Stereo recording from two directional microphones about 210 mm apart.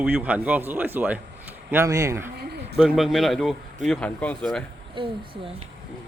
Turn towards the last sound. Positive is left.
turn(degrees=-25)  # may be behind; listen again after turning